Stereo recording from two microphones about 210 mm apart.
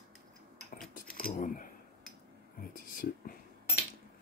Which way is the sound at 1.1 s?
45° left (ahead or behind).